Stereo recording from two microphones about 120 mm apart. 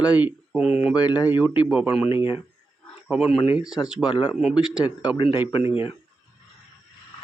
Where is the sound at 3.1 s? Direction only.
5° right (ahead or behind).